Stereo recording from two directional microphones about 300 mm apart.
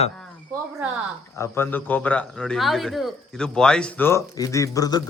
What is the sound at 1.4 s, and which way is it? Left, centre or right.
A man's voice, centre.